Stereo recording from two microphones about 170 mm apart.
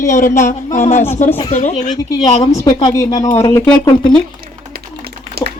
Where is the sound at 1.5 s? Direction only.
45° left (ahead or behind).